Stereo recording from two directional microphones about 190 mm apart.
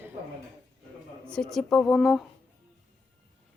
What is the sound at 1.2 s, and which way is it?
A man's voice, 5° left (ahead or behind).